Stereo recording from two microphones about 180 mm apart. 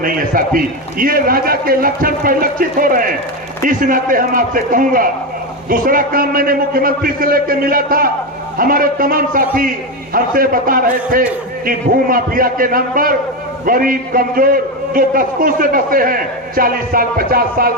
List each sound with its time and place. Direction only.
0.0 s a man's voice: 50° right (ahead or behind)